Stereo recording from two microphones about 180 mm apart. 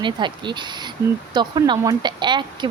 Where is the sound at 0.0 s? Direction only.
25° right (ahead or behind).